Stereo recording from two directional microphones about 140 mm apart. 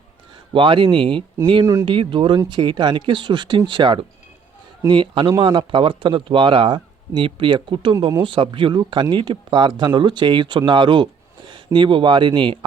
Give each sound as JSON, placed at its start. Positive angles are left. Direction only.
{"t": 0.5, "sound": "speech", "side_deg": -35}